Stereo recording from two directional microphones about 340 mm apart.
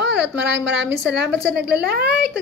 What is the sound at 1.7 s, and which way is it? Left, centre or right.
Speech, right.